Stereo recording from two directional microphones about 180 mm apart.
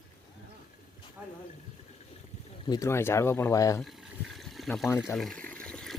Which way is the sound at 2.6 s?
20° left (ahead or behind).